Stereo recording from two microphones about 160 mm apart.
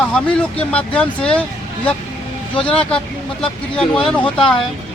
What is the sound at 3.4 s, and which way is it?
Speech, 35° left (ahead or behind).